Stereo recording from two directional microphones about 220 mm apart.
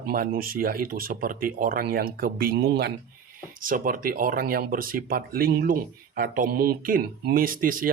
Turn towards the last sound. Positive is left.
turn(degrees=-40)  # may be behind; listen again after turning